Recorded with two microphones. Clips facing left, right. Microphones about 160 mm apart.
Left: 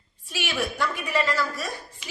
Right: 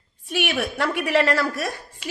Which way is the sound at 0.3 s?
60° right (ahead or behind).